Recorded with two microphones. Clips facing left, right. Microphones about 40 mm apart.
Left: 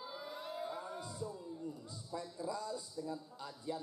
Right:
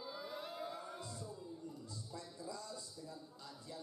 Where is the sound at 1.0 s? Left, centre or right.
Centre.